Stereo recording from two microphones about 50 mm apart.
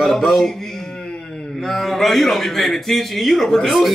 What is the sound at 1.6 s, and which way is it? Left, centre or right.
Speech, centre.